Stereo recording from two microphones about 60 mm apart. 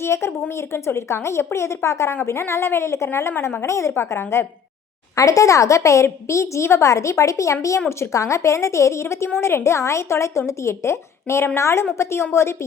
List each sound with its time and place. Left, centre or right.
0.0 s a woman's voice: left
5.1 s a woman's voice: left